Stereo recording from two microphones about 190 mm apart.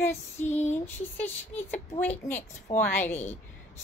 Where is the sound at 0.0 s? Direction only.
15° left (ahead or behind).